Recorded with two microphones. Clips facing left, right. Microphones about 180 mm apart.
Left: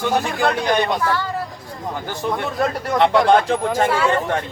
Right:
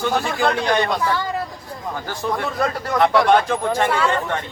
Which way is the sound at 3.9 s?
5° left (ahead or behind).